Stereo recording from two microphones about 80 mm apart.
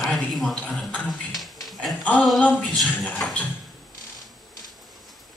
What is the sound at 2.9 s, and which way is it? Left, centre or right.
Music, left.